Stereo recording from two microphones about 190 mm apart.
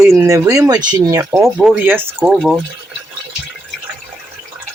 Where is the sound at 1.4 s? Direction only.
Centre (ahead or behind).